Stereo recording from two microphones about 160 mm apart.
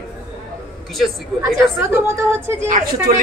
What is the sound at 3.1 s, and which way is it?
Speech, 55° right (ahead or behind).